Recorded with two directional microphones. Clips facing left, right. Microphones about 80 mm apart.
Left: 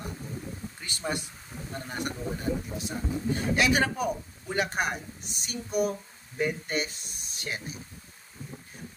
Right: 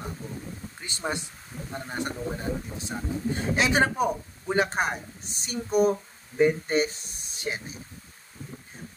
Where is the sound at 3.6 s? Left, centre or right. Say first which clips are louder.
Right 3 dB; right.